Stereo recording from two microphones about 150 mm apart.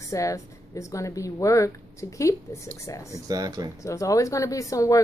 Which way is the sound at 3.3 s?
25° right (ahead or behind).